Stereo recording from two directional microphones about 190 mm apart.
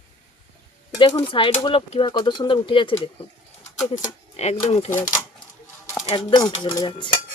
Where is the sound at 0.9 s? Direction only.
25° left (ahead or behind).